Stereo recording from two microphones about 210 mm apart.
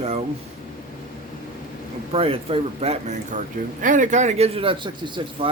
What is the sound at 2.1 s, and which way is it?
Speech, 25° right (ahead or behind).